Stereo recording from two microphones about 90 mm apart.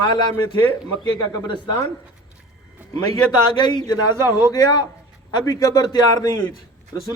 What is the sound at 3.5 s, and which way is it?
Speech, 50° left (ahead or behind).